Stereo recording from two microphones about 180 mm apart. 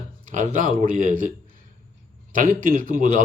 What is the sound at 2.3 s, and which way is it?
Speech, 45° right (ahead or behind).